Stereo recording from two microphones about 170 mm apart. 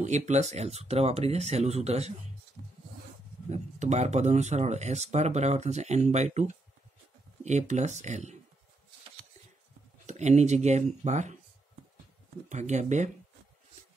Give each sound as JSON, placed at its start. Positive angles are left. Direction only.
{"t": 0.0, "sound": "speech", "side_deg": -40}
{"t": 3.4, "sound": "speech", "side_deg": -40}
{"t": 10.0, "sound": "speech", "side_deg": -40}
{"t": 12.4, "sound": "speech", "side_deg": -45}